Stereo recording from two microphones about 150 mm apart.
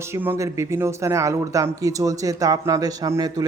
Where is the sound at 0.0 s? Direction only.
15° right (ahead or behind).